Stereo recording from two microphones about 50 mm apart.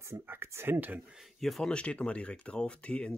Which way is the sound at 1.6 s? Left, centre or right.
Left.